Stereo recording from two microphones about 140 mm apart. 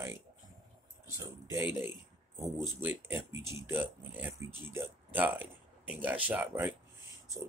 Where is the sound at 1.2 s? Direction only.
20° right (ahead or behind).